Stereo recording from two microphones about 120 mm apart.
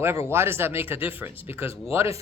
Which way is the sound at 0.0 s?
20° right (ahead or behind).